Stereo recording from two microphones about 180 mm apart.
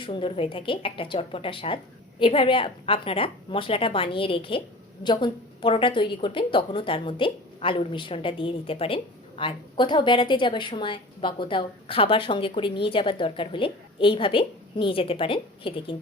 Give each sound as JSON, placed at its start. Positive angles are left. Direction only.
{"t": 0.0, "sound": "a woman's voice", "side_deg": 30}